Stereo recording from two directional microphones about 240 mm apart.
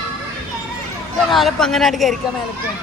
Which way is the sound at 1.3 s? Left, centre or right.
Centre.